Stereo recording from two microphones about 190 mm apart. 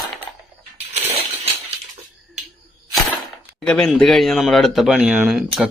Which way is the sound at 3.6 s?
5° left (ahead or behind).